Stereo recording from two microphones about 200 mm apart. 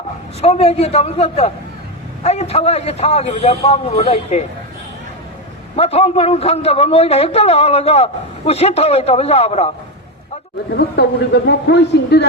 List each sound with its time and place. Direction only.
0.4 s a man's voice: 30° left (ahead or behind)
5.7 s a man's voice: 30° left (ahead or behind)
10.7 s a woman's voice: 55° left (ahead or behind)